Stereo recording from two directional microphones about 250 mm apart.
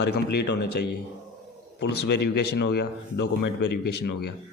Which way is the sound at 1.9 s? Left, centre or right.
Left.